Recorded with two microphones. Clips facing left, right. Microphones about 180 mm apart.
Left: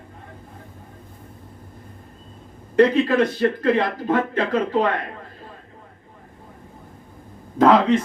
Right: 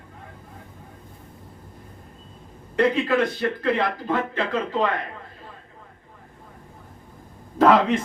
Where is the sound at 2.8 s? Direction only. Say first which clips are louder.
Left 4 dB; 40° left (ahead or behind).